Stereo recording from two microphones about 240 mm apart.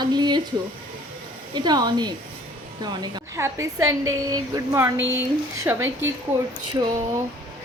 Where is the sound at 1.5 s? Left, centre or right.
Centre.